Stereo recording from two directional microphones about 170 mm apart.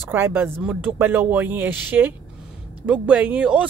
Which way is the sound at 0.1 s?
15° right (ahead or behind).